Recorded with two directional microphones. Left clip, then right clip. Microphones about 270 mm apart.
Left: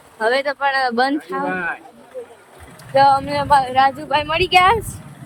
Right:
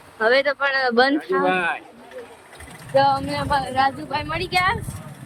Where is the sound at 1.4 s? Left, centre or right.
Right.